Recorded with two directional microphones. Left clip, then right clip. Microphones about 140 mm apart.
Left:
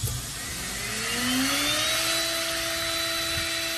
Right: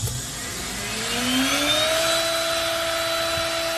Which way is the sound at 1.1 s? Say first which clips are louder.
Right 4 dB; 5° right (ahead or behind).